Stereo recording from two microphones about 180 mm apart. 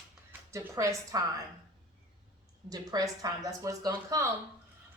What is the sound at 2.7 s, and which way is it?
Speech, 20° right (ahead or behind).